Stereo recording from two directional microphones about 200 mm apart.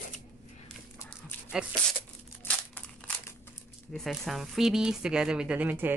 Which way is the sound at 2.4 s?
5° left (ahead or behind).